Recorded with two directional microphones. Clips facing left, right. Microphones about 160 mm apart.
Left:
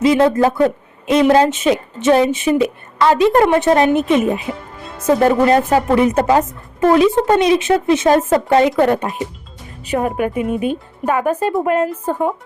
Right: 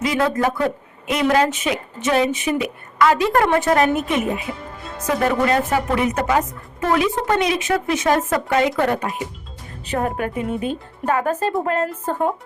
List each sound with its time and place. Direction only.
0.0 s speech: 25° left (ahead or behind)
9.8 s speech: 10° left (ahead or behind)